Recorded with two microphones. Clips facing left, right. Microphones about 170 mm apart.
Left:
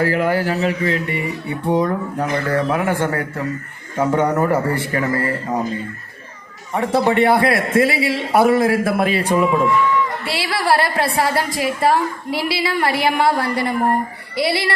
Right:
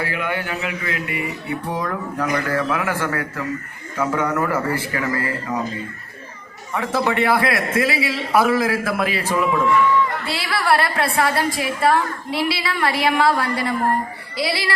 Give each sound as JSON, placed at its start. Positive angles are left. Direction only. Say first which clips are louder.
{"t": 0.0, "sound": "a man's voice", "louder": "left 7 dB", "side_deg": 40}
{"t": 6.7, "sound": "a man's voice", "louder": "left 4 dB", "side_deg": 30}
{"t": 12.3, "sound": "a woman's voice", "louder": "right 1 dB", "side_deg": -25}
{"t": 12.5, "sound": "a man's voice", "louder": "left 3 dB", "side_deg": 25}